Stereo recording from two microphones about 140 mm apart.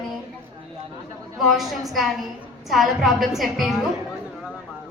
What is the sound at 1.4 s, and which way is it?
A woman's voice, centre (ahead or behind).